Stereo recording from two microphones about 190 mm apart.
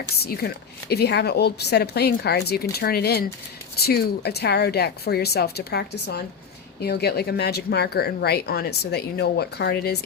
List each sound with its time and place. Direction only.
0.2 s speech: 55° left (ahead or behind)